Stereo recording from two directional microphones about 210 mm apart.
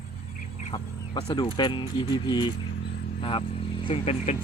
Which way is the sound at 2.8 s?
50° left (ahead or behind).